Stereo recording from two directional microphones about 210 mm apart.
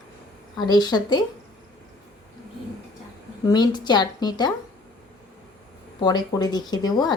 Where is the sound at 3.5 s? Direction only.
20° left (ahead or behind).